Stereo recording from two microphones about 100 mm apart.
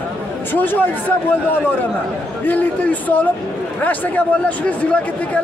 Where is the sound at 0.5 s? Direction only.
20° left (ahead or behind).